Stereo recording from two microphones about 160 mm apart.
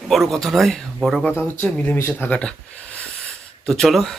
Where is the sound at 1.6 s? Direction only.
10° left (ahead or behind).